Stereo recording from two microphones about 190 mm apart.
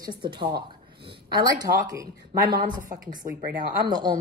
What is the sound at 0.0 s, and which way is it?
A woman's voice, 25° right (ahead or behind).